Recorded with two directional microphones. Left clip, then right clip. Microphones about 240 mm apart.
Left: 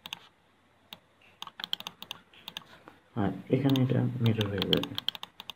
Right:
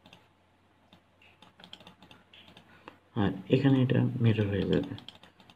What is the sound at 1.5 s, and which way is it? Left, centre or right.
Computer keyboard, left.